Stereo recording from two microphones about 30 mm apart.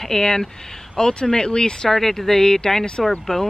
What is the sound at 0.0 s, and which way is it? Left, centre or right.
Speech, centre.